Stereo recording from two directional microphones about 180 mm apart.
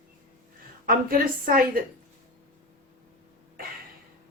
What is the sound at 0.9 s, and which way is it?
Speech, 50° right (ahead or behind).